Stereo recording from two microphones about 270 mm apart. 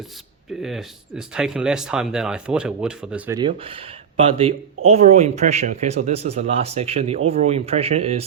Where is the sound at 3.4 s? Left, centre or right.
Centre.